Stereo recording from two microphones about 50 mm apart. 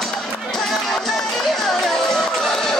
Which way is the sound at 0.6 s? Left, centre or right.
Centre.